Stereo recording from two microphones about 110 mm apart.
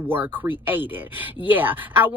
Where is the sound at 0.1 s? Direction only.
15° right (ahead or behind).